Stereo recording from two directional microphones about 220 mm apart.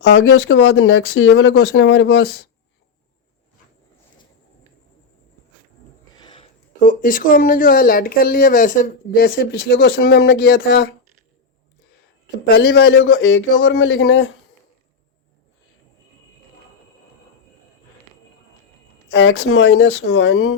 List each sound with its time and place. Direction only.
0.0 s speech: 60° left (ahead or behind)
6.1 s speech: 25° left (ahead or behind); by 10.8 s 45° left (ahead or behind)
12.5 s speech: 50° left (ahead or behind)
19.1 s speech: 65° left (ahead or behind)